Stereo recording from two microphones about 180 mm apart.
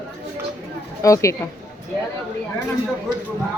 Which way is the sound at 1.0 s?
15° left (ahead or behind).